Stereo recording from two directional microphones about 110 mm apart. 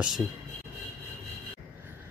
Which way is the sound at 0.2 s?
5° right (ahead or behind).